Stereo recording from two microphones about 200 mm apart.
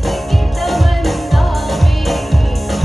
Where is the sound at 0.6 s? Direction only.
Centre (ahead or behind).